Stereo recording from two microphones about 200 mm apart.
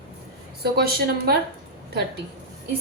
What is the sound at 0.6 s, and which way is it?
Speech, 50° right (ahead or behind).